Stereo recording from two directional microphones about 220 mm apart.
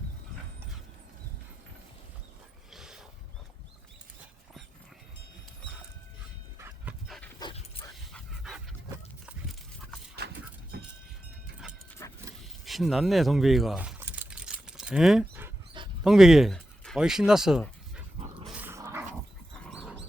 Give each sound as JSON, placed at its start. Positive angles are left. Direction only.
{"t": 2.7, "sound": "a sound", "side_deg": 0}
{"t": 6.6, "sound": "dog", "side_deg": -10}
{"t": 7.3, "sound": "dog", "side_deg": 20}
{"t": 8.1, "sound": "dog", "side_deg": 0}
{"t": 10.2, "sound": "a sound", "side_deg": -45}
{"t": 12.6, "sound": "typing", "side_deg": 0}
{"t": 16.0, "sound": "speech", "side_deg": 0}
{"t": 18.4, "sound": "dog", "side_deg": -5}